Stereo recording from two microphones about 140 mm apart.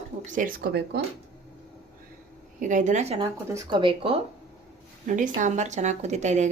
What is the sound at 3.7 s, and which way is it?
Speech, 35° right (ahead or behind).